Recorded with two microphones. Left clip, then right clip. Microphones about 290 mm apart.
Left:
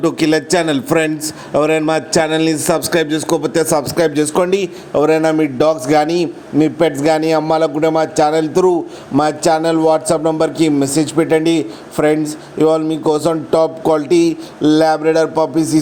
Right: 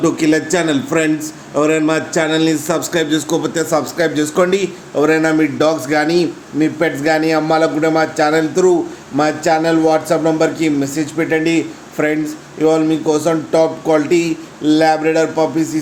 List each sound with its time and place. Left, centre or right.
0.0 s a man's voice: left